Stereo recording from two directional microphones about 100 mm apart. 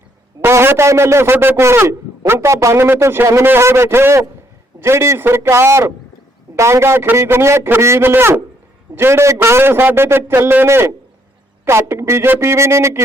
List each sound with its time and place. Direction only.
0.4 s a man's voice: 25° right (ahead or behind)